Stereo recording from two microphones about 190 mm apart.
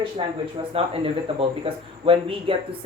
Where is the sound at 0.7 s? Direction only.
30° right (ahead or behind).